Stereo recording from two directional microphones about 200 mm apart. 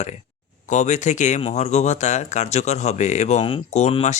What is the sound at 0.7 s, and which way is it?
Speech, 35° left (ahead or behind).